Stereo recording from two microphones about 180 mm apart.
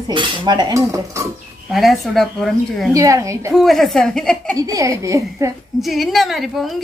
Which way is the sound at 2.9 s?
20° right (ahead or behind).